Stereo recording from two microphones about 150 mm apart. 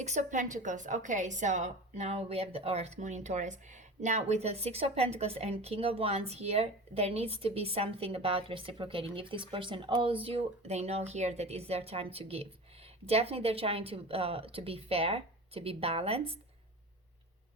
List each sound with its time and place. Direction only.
0.0 s a woman's voice: 50° right (ahead or behind)